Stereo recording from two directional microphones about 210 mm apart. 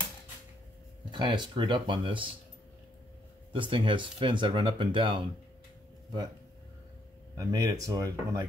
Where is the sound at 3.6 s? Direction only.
25° right (ahead or behind).